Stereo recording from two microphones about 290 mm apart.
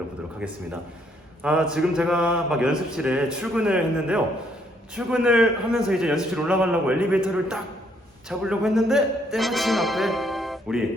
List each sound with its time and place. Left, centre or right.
1.4 s a man's voice: centre